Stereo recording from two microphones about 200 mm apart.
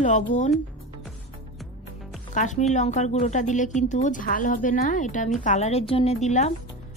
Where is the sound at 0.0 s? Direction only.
40° left (ahead or behind).